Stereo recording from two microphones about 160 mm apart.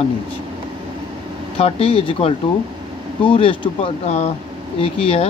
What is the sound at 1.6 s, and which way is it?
Speech, 35° left (ahead or behind).